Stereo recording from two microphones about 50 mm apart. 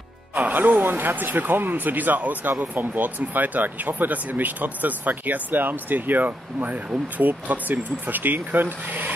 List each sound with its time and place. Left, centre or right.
0.3 s speech: right